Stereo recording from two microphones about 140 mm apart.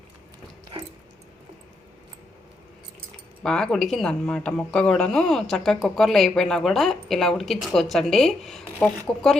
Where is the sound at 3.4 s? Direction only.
5° left (ahead or behind).